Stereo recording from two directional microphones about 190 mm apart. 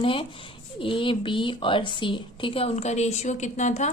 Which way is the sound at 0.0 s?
30° left (ahead or behind).